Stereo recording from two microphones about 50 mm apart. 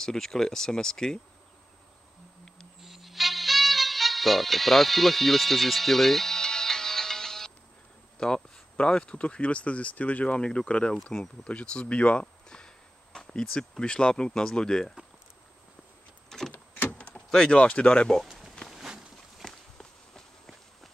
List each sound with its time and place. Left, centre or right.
0.0 s speech: centre
2.8 s music: centre
8.2 s speech: centre
12.4 s speech: centre
16.3 s vehicle: centre
16.5 s vehicle: left
17.0 s vehicle: centre
17.6 s speech: left
18.7 s a sound: centre
19.4 s walk: centre